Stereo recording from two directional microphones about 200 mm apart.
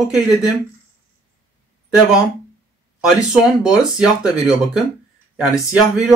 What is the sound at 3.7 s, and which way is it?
Speech, 5° right (ahead or behind).